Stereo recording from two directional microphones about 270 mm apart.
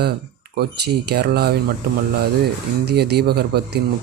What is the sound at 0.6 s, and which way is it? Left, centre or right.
Speech, right.